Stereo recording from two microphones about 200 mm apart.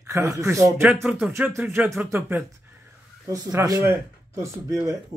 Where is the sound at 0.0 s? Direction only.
15° right (ahead or behind).